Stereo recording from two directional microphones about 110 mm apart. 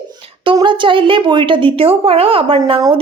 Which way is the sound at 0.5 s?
45° right (ahead or behind).